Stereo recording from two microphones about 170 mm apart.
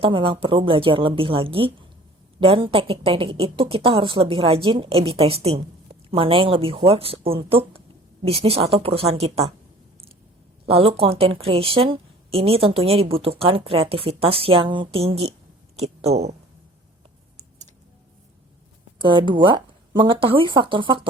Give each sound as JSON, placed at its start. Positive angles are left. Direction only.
{"t": 0.0, "sound": "a woman's voice", "side_deg": -30}
{"t": 10.7, "sound": "a woman's voice", "side_deg": -35}
{"t": 18.9, "sound": "speech", "side_deg": -30}